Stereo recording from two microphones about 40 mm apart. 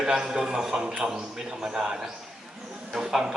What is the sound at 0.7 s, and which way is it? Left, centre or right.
Speech, right.